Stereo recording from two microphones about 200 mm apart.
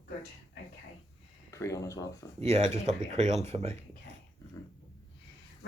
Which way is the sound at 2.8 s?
35° right (ahead or behind).